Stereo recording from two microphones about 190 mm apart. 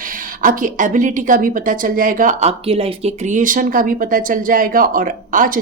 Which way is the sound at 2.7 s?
30° right (ahead or behind).